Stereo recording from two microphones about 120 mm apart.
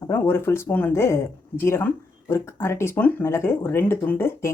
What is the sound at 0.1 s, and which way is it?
Speech, 20° left (ahead or behind).